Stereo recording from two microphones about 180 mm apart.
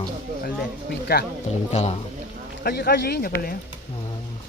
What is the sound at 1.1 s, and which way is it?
Speech, 60° left (ahead or behind).